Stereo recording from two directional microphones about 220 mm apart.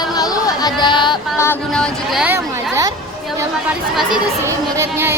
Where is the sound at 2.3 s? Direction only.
15° right (ahead or behind).